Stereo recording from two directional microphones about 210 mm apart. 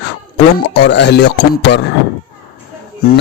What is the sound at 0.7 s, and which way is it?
Speech, 55° left (ahead or behind).